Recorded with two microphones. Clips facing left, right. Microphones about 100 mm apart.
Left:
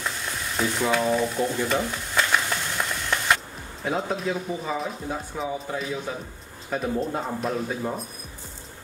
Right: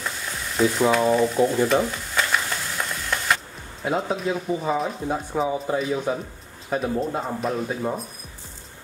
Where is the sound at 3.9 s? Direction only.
Centre (ahead or behind).